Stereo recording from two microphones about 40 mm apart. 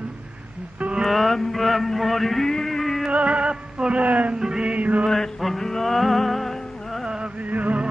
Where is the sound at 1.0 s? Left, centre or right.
Centre.